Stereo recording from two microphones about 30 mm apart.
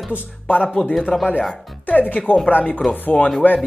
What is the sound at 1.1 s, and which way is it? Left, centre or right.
Speech, left.